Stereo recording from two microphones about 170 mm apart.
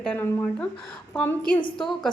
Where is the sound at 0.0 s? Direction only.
10° left (ahead or behind).